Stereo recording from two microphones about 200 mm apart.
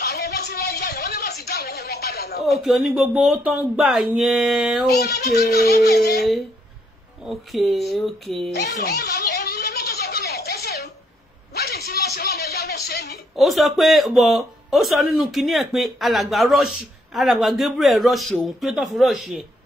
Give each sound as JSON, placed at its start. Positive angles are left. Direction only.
{"t": 0.0, "sound": "a sound", "side_deg": 55}
{"t": 2.4, "sound": "a man's voice", "side_deg": 0}
{"t": 5.0, "sound": "music", "side_deg": 50}
{"t": 7.2, "sound": "a man's voice", "side_deg": 0}
{"t": 8.5, "sound": "a sound", "side_deg": 55}
{"t": 13.4, "sound": "a man's voice", "side_deg": 0}